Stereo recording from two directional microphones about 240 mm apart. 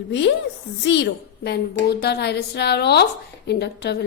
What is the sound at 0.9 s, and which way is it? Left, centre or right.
A woman's voice, left.